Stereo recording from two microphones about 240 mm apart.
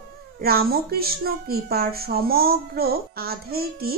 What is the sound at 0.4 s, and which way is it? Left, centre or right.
Speech, right.